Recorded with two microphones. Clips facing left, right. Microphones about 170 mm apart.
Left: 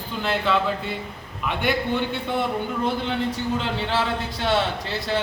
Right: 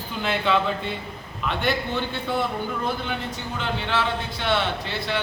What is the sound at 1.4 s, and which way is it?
Speech, 10° left (ahead or behind).